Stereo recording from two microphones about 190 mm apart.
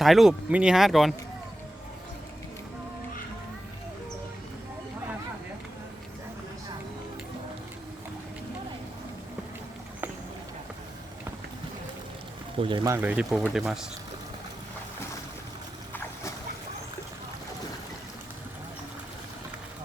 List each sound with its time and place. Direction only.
0.0 s speech: centre (ahead or behind)
12.5 s speech: 25° right (ahead or behind)
12.9 s speech: 10° right (ahead or behind)